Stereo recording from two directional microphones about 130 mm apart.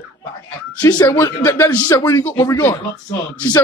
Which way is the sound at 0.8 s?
30° left (ahead or behind).